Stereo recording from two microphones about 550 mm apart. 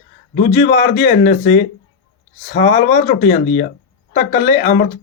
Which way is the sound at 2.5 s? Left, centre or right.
Centre.